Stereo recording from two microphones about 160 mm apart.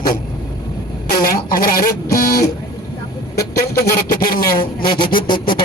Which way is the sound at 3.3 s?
70° left (ahead or behind).